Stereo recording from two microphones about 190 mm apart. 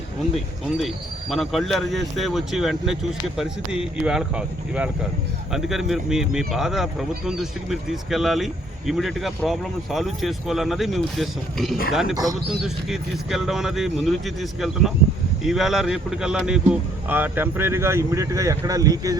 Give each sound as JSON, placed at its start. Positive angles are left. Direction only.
{"t": 0.8, "sound": "speech", "side_deg": 0}
{"t": 12.1, "sound": "speech", "side_deg": -20}
{"t": 12.5, "sound": "speech", "side_deg": 0}